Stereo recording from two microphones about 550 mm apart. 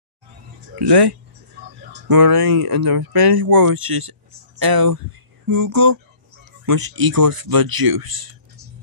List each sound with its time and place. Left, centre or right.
0.7 s speech: right